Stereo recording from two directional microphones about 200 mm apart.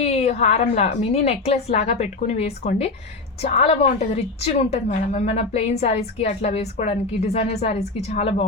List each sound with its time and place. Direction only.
0.0 s a woman's voice: 30° left (ahead or behind)